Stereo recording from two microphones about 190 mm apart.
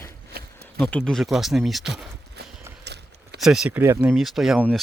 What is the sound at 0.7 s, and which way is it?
Speech, centre (ahead or behind).